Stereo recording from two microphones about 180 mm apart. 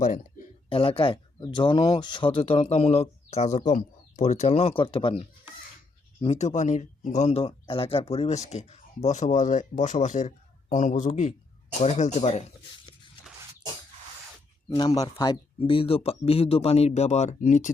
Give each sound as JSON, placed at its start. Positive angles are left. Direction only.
{"t": 0.0, "sound": "speech", "side_deg": 45}
{"t": 0.7, "sound": "speech", "side_deg": 30}
{"t": 14.8, "sound": "speech", "side_deg": 20}